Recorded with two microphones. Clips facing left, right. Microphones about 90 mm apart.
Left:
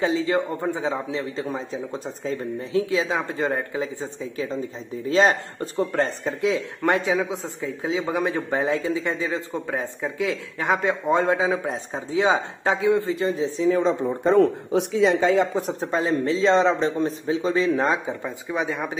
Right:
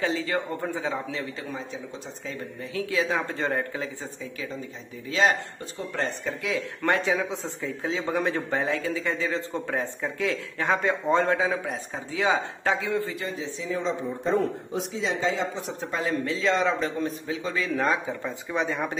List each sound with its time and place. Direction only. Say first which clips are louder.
0.0 s speech: left 5 dB; 20° left (ahead or behind)
5.0 s speech: left 4 dB; 35° left (ahead or behind)
6.4 s speech: left 5 dB; 20° left (ahead or behind)
7.1 s speech: left 3 dB; 5° left (ahead or behind); by 13.7 s 35° left (ahead or behind)
13.7 s speech: left 7 dB; 55° left (ahead or behind)
15.5 s speech: left 7 dB; 40° left (ahead or behind); by 18.3 s 20° left (ahead or behind)
18.5 s speech: left 1 dB; 5° left (ahead or behind)